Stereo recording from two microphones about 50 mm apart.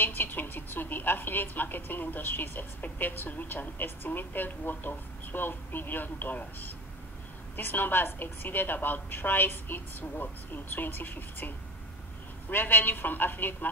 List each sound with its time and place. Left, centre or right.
0.0 s a woman's voice: left